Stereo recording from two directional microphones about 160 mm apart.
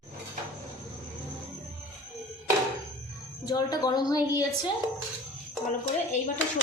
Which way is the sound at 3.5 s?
25° left (ahead or behind).